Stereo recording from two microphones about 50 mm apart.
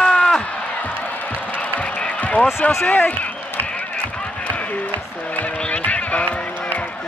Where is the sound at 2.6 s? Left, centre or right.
Left.